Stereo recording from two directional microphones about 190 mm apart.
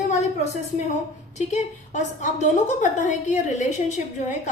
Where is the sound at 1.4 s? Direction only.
35° left (ahead or behind).